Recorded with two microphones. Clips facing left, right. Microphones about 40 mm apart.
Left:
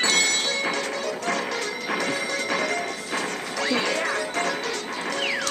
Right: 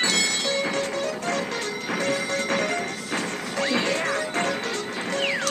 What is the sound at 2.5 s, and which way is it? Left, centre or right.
Music, right.